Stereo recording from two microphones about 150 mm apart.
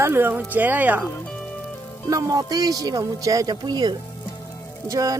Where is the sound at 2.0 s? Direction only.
25° right (ahead or behind).